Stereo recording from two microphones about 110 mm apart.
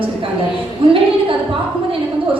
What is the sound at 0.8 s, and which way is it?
Speech, 55° right (ahead or behind).